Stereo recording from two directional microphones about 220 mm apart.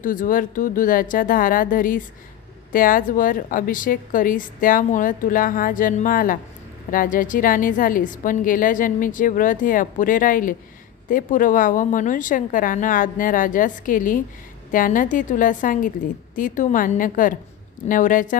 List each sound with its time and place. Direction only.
0.0 s a woman's voice: 40° left (ahead or behind)